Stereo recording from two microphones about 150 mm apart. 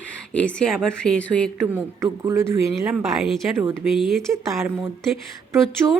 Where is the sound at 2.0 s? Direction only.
20° right (ahead or behind).